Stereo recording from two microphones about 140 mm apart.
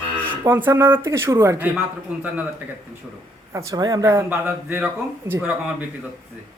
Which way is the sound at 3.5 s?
20° right (ahead or behind).